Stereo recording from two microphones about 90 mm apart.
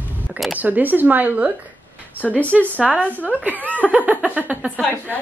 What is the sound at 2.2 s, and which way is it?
A woman's voice, 15° left (ahead or behind).